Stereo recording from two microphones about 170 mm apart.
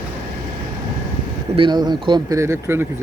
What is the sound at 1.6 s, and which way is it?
Speech, 25° right (ahead or behind).